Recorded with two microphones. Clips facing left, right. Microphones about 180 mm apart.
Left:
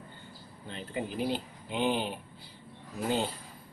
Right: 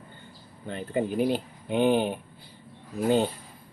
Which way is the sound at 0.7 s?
55° right (ahead or behind).